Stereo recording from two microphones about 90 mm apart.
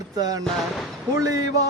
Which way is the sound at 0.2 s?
45° right (ahead or behind).